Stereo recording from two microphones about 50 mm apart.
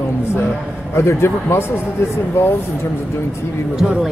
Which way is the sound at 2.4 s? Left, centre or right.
Left.